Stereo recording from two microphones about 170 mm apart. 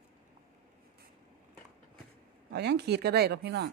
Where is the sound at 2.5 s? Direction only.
75° right (ahead or behind).